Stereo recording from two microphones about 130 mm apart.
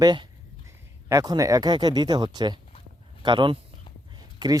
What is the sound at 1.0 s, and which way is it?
Speech, 30° right (ahead or behind).